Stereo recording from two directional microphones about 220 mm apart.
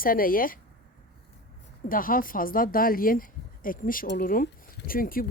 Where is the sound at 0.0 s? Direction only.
40° left (ahead or behind).